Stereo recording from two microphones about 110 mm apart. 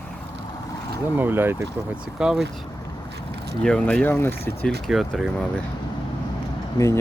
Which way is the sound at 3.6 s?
10° left (ahead or behind).